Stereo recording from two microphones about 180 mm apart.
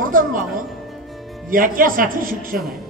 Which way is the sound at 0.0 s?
50° right (ahead or behind).